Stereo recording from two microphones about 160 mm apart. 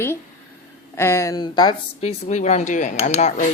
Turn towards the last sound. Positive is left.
turn(degrees=45)  # may be behind; listen again after turning